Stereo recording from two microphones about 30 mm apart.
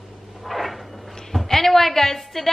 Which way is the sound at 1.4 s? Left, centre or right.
Centre.